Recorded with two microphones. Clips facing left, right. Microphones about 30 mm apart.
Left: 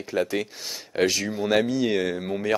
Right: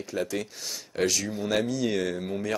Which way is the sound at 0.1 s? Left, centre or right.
Left.